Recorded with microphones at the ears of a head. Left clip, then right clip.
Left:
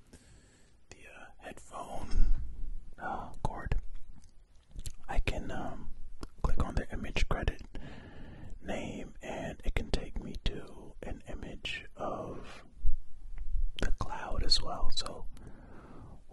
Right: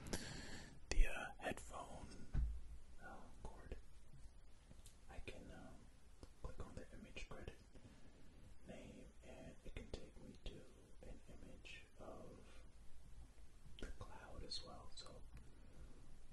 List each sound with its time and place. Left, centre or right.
0.0 s whispering: right
1.7 s whispering: left
13.7 s whispering: left